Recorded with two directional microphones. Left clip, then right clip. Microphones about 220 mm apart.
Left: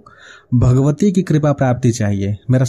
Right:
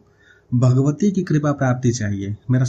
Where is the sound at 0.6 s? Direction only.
35° left (ahead or behind).